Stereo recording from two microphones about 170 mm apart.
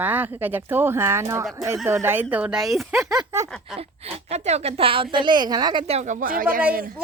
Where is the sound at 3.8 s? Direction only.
35° right (ahead or behind).